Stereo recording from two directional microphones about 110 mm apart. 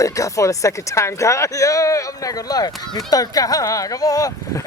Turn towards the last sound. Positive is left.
turn(degrees=30)  # may be behind; listen again after turning